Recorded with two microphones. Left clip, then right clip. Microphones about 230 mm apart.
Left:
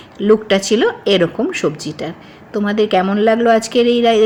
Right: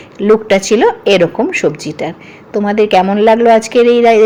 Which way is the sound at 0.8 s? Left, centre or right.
Centre.